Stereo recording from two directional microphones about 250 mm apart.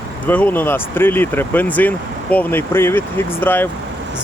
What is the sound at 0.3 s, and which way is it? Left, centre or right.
Speech, centre.